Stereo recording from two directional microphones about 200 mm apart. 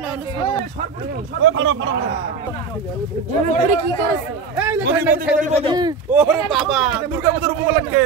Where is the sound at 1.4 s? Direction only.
70° right (ahead or behind).